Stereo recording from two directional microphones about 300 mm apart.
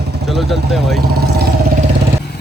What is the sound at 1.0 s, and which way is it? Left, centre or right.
Vehicle, right.